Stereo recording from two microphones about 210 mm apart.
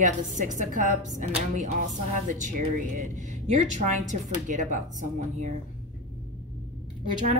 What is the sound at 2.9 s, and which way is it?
A woman's voice, 35° right (ahead or behind).